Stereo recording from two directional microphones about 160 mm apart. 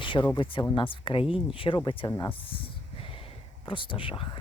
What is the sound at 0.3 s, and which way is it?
Speech, 30° left (ahead or behind).